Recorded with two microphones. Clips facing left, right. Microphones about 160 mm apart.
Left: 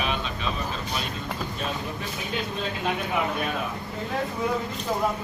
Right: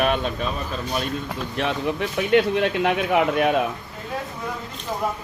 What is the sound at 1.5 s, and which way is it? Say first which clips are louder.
Speech: right 7 dB; 75° right (ahead or behind).